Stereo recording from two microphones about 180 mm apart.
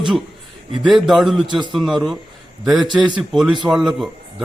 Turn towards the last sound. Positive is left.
turn(degrees=0)  # may be behind; listen again after turning